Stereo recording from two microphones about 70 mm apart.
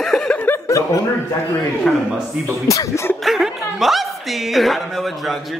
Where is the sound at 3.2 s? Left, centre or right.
Centre.